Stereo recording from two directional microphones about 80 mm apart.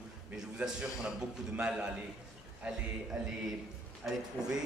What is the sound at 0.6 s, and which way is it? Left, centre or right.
A man's voice, centre.